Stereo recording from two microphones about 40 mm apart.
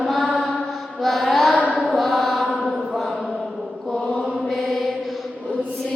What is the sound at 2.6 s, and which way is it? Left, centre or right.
Mantra, centre.